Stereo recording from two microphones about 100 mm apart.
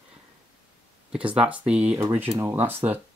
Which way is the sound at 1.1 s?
15° right (ahead or behind).